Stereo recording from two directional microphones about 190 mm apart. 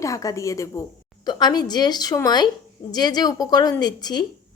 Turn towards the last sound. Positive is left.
turn(degrees=20)  # may be behind; listen again after turning